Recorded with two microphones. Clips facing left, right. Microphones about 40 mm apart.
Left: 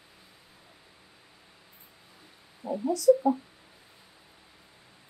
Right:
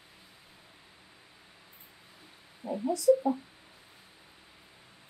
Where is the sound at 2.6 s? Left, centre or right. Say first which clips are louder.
Left 2 dB; right.